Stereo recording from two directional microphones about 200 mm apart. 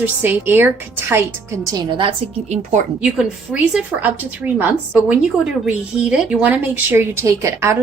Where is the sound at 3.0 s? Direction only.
5° right (ahead or behind).